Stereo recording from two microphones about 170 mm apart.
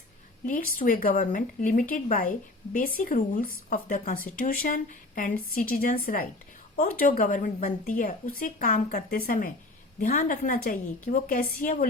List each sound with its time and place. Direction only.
0.4 s speech: 50° left (ahead or behind)